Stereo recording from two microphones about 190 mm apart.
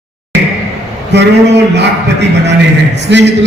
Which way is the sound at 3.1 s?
65° right (ahead or behind).